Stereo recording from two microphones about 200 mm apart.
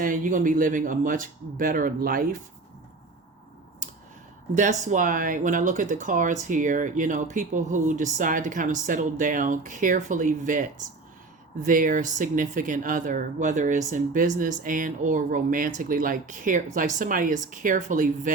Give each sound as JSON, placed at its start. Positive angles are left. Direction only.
{"t": 0.0, "sound": "speech", "side_deg": -40}
{"t": 4.5, "sound": "speech", "side_deg": -35}